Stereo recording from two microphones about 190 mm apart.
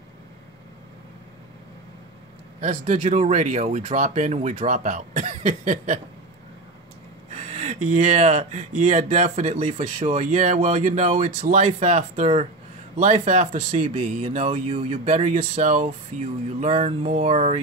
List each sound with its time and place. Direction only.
2.6 s speech: 40° right (ahead or behind)
7.3 s speech: 35° right (ahead or behind)